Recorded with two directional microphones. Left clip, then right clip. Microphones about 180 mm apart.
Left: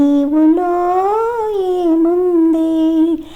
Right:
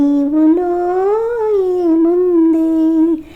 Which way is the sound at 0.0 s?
30° left (ahead or behind).